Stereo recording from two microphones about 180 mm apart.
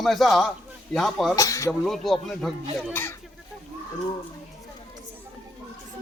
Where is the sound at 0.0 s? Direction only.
Centre (ahead or behind).